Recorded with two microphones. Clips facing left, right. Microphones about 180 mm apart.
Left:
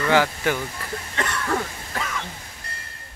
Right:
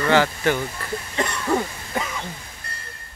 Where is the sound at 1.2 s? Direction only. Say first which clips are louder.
Right 3 dB; 20° right (ahead or behind).